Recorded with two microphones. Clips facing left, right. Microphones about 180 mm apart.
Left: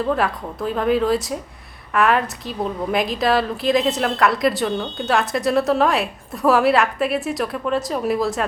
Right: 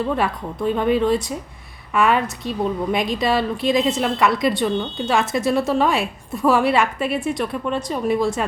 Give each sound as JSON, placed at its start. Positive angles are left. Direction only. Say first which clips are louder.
{"t": 0.0, "sound": "a woman's voice", "louder": "left 1 dB", "side_deg": 0}